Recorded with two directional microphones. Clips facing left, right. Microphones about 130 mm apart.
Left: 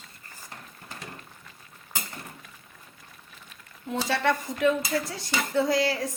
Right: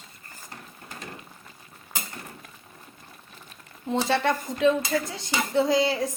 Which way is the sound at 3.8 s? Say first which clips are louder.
Right 2 dB; 25° right (ahead or behind).